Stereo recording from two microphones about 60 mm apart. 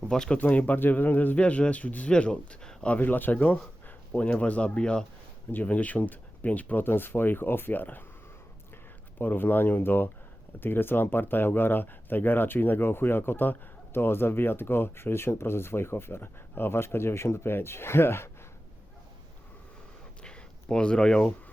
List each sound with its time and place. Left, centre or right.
0.1 s speech: centre
0.3 s speech: left
3.0 s speech: left; by 5.0 s centre
5.5 s speech: left
9.1 s speech: left
20.2 s a sound: centre